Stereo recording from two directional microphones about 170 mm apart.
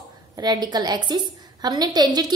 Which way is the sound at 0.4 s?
25° right (ahead or behind).